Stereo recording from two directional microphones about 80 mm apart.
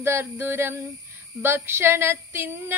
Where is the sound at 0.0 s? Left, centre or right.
Right.